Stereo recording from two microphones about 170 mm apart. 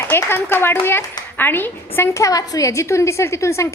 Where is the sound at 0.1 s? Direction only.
15° left (ahead or behind).